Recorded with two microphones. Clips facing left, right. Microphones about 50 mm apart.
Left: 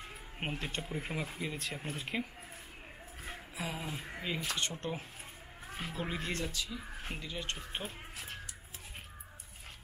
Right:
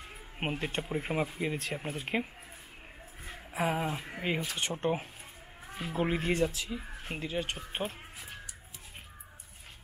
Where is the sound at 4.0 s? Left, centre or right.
Centre.